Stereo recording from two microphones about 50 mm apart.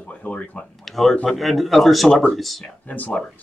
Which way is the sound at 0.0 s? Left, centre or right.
Left.